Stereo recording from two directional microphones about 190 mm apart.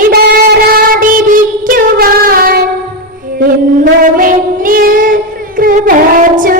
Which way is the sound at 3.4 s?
50° right (ahead or behind).